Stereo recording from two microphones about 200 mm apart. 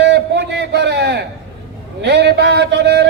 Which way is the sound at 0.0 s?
60° right (ahead or behind).